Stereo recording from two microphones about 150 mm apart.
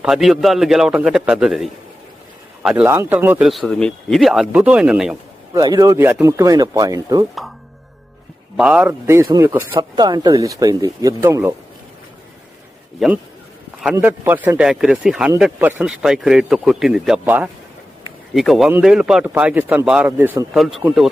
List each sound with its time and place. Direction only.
0.0 s speech: centre (ahead or behind)
3.5 s speech: 5° left (ahead or behind)
5.5 s speech: 25° right (ahead or behind)
8.5 s speech: 5° right (ahead or behind)
8.9 s speech: 15° right (ahead or behind)
9.7 s speech: 30° right (ahead or behind)
13.0 s speech: centre (ahead or behind)
13.9 s speech: 15° right (ahead or behind)
20.5 s speech: centre (ahead or behind)